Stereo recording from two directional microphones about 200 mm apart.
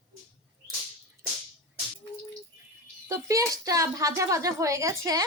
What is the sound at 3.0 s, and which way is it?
Speech, 15° right (ahead or behind).